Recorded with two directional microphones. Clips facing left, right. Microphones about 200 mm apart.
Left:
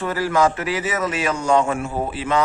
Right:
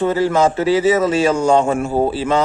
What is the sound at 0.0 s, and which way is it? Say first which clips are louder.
A man's voice: right 4 dB; 25° right (ahead or behind).